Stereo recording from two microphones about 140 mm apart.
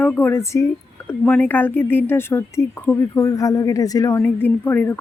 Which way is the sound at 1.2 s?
10° left (ahead or behind).